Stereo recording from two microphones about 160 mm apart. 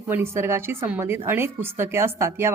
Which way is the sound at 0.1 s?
15° right (ahead or behind).